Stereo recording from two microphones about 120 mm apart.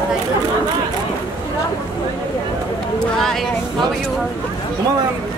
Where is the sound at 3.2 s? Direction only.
Centre (ahead or behind).